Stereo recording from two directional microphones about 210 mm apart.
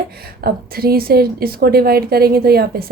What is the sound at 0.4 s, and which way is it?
A woman's voice, 45° right (ahead or behind).